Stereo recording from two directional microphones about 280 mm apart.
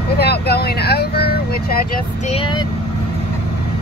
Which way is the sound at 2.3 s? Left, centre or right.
Centre.